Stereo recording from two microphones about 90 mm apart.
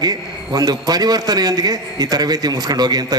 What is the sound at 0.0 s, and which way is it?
A man's voice, 45° right (ahead or behind).